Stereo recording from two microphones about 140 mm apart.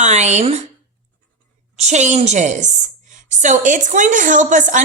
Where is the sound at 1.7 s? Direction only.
55° right (ahead or behind).